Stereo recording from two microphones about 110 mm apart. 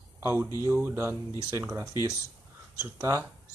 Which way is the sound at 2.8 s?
30° right (ahead or behind).